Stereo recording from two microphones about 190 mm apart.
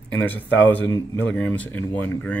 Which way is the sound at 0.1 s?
10° left (ahead or behind).